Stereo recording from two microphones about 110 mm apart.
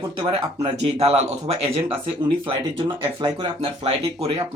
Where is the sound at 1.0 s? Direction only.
70° right (ahead or behind).